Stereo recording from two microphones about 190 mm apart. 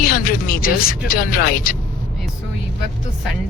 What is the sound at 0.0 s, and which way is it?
Speech, 50° left (ahead or behind).